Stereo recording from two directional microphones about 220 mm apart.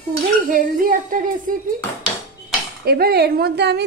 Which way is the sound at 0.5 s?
40° right (ahead or behind).